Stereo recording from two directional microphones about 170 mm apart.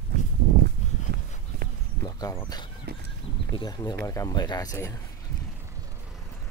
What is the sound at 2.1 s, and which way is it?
Speech, 20° left (ahead or behind).